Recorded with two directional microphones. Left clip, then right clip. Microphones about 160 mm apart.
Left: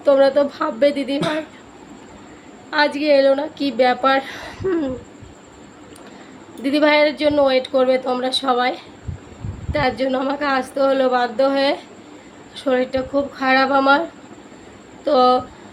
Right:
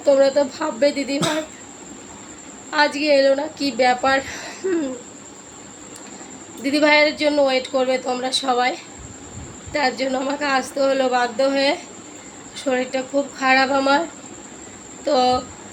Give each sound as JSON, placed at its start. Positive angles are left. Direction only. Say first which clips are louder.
{"t": 0.0, "sound": "a woman's voice", "louder": "left 1 dB", "side_deg": 10}
{"t": 2.6, "sound": "a woman's voice", "louder": "left 1 dB", "side_deg": 15}
{"t": 6.6, "sound": "a woman's voice", "louder": "even", "side_deg": 15}
{"t": 15.0, "sound": "a woman's voice", "louder": "left 3 dB", "side_deg": 15}